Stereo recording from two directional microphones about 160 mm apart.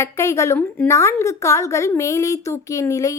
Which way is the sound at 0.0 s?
20° left (ahead or behind).